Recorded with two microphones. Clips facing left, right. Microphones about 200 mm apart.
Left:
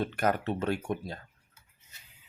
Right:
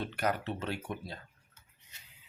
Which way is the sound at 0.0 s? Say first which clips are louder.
Left 4 dB; 50° left (ahead or behind).